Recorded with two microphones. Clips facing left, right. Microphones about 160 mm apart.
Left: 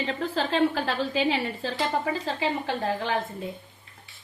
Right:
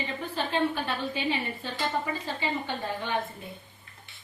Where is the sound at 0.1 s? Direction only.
90° left.